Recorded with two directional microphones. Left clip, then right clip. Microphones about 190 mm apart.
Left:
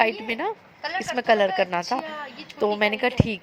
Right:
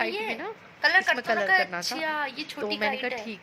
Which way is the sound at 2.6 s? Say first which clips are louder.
Left 7 dB; 25° left (ahead or behind).